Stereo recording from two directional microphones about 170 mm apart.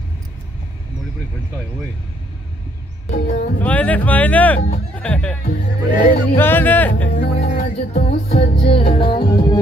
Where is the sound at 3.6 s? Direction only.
10° left (ahead or behind).